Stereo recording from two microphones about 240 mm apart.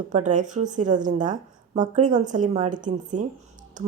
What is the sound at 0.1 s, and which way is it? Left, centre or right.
Speech, right.